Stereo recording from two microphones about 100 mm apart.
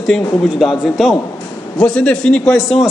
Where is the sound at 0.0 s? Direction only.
Centre (ahead or behind).